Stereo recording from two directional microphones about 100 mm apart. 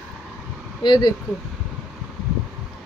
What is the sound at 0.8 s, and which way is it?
Speech, 45° left (ahead or behind).